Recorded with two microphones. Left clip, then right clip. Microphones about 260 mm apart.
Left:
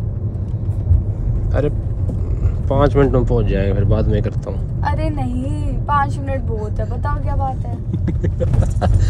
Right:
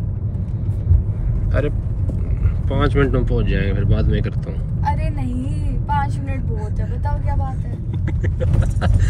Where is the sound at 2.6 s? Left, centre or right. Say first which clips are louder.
Left 5 dB; centre.